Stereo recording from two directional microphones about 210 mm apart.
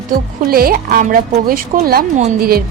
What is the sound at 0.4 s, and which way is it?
A woman's voice, 45° right (ahead or behind).